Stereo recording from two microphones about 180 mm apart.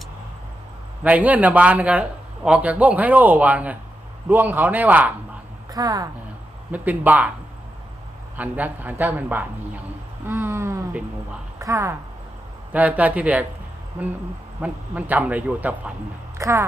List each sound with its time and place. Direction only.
1.0 s a man's voice: 10° right (ahead or behind)
5.7 s a woman's voice: 20° right (ahead or behind)
6.7 s a man's voice: 10° right (ahead or behind)
8.4 s a man's voice: 10° right (ahead or behind)
14.6 s a man's voice: 10° right (ahead or behind)